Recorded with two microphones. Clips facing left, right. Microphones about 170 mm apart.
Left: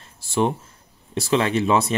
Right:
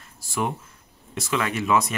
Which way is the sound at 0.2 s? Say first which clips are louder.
Left 6 dB; 25° left (ahead or behind).